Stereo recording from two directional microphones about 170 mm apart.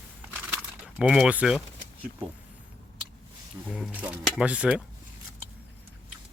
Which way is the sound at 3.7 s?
5° right (ahead or behind).